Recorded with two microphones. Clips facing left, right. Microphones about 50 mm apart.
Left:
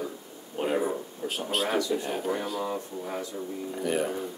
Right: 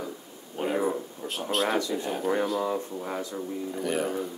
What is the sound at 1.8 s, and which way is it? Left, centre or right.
Speech, right.